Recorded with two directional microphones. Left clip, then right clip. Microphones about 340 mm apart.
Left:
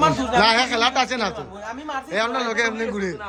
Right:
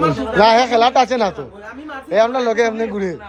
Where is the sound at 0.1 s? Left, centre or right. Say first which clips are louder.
Right 5 dB; centre.